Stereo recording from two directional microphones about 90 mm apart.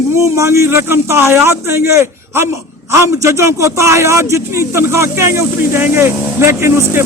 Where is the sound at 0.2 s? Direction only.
30° right (ahead or behind).